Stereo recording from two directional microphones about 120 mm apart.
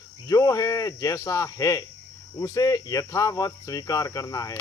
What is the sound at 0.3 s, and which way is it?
Speech, 30° left (ahead or behind).